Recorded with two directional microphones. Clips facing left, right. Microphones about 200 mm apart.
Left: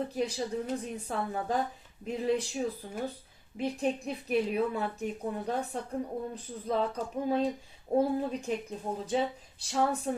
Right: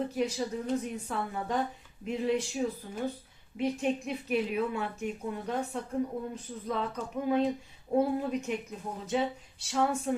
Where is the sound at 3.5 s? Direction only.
35° left (ahead or behind).